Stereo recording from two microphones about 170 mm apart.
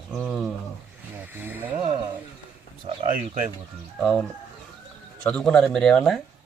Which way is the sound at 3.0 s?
50° right (ahead or behind).